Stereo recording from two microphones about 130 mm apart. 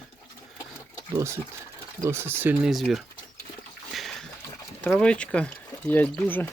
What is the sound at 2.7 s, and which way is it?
Speech, centre (ahead or behind).